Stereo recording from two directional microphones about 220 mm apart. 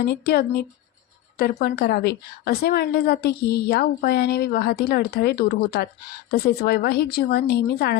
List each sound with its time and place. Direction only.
0.0 s a woman's voice: 45° left (ahead or behind)